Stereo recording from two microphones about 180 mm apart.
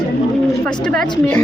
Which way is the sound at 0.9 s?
10° left (ahead or behind).